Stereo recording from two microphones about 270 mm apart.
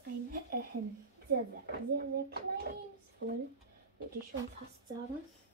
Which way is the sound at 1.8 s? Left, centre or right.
Right.